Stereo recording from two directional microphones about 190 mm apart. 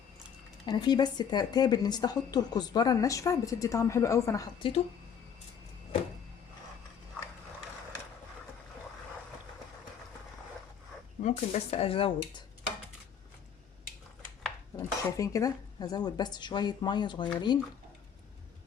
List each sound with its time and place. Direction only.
0.6 s speech: 20° left (ahead or behind)
4.6 s speech: 30° left (ahead or behind)
11.2 s speech: 40° left (ahead or behind)
14.8 s speech: 15° left (ahead or behind)